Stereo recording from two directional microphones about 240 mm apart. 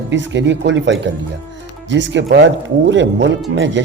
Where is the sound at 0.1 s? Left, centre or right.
Right.